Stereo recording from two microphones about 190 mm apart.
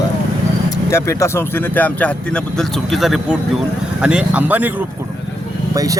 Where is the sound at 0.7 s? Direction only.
15° left (ahead or behind).